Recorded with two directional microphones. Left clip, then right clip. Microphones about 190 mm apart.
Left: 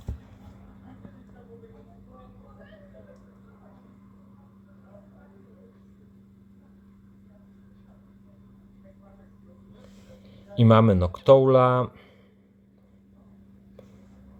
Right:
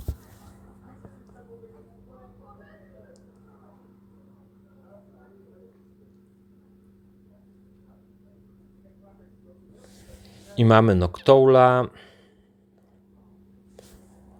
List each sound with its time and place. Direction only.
10.5 s speech: 25° right (ahead or behind)